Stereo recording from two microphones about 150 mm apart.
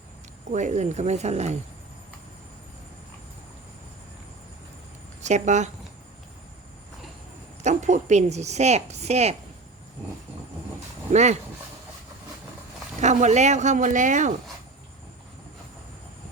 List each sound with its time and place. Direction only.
0.5 s a woman's voice: 50° right (ahead or behind)
5.2 s a woman's voice: 50° right (ahead or behind)
7.6 s a woman's voice: 55° right (ahead or behind)
11.1 s a woman's voice: 50° right (ahead or behind)
13.0 s a woman's voice: 50° right (ahead or behind)